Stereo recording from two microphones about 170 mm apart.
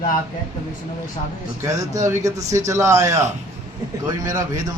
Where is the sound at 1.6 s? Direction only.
20° right (ahead or behind).